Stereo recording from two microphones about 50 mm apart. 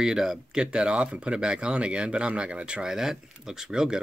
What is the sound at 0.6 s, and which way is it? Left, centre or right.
Speech, centre.